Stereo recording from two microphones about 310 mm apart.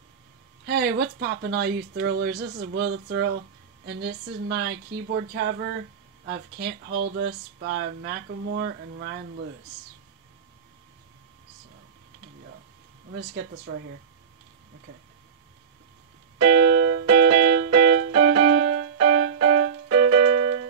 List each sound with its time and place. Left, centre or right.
0.7 s speech: right
14.9 s speech: right
16.3 s music: right
17.6 s keyboard: right